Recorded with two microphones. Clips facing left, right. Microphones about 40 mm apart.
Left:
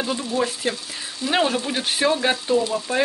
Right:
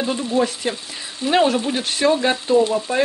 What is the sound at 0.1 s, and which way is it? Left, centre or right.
Frying, right.